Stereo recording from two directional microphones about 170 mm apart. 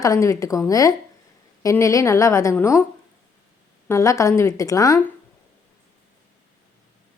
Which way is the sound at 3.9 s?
15° left (ahead or behind).